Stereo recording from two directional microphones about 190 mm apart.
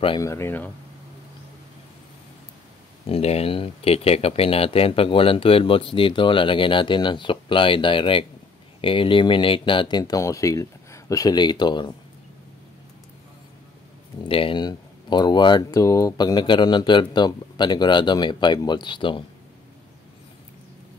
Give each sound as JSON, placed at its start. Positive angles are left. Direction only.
{"t": 0.2, "sound": "speech", "side_deg": 15}
{"t": 3.1, "sound": "speech", "side_deg": 35}
{"t": 14.2, "sound": "speech", "side_deg": 25}